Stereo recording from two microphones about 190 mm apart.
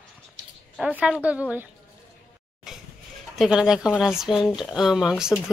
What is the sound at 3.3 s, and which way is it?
Speech, 5° right (ahead or behind).